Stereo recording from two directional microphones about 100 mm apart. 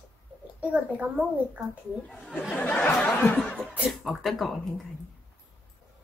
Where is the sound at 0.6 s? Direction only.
15° right (ahead or behind).